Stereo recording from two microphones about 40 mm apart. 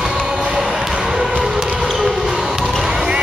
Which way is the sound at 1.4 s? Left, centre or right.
Centre.